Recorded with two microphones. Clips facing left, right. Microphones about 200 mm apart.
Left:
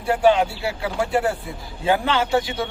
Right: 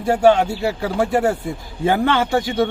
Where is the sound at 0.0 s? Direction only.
45° right (ahead or behind).